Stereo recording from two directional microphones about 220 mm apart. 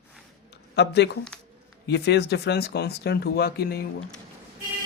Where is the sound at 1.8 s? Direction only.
50° left (ahead or behind).